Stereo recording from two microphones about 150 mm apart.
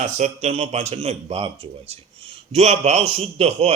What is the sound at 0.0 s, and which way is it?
A man's voice, 45° right (ahead or behind).